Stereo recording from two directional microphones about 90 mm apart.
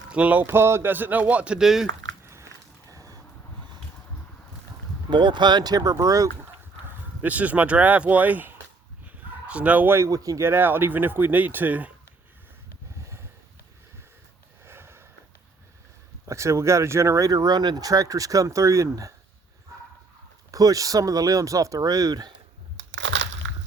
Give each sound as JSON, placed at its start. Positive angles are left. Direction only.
{"t": 0.1, "sound": "speech", "side_deg": -15}
{"t": 0.4, "sound": "speech", "side_deg": -25}
{"t": 2.2, "sound": "a sound", "side_deg": -30}
{"t": 5.1, "sound": "speech", "side_deg": -60}
{"t": 7.2, "sound": "speech", "side_deg": -15}
{"t": 10.1, "sound": "speech", "side_deg": -40}
{"t": 10.4, "sound": "speech", "side_deg": -25}
{"t": 14.6, "sound": "sniff", "side_deg": -25}
{"t": 16.2, "sound": "speech", "side_deg": -35}
{"t": 20.5, "sound": "speech", "side_deg": -40}